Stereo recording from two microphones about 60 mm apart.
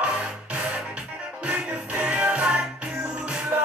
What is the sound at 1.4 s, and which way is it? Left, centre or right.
Music, centre.